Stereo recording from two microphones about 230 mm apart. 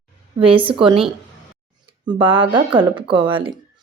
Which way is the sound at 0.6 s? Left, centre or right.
Right.